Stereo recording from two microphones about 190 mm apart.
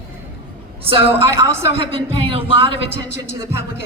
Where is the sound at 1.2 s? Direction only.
15° right (ahead or behind).